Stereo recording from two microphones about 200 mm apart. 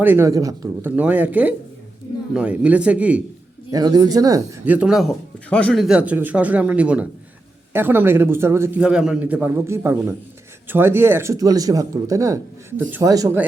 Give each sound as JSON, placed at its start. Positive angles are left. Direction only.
{"t": 0.0, "sound": "speech", "side_deg": -10}
{"t": 3.7, "sound": "speech", "side_deg": -20}